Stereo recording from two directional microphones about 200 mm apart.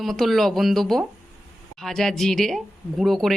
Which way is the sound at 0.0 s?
Centre (ahead or behind).